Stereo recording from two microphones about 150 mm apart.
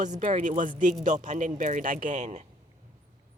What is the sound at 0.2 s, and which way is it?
Speech, 55° right (ahead or behind).